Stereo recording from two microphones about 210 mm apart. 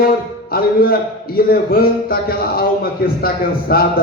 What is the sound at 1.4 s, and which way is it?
A man's voice, 45° left (ahead or behind).